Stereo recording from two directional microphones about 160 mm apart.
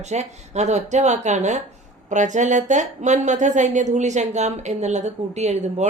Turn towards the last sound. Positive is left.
turn(degrees=-45)  # may be behind; listen again after turning